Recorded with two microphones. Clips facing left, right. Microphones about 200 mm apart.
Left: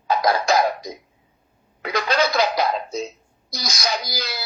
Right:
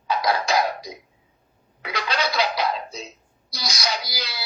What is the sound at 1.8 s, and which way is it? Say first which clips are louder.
Speech: left 5 dB; 45° left (ahead or behind).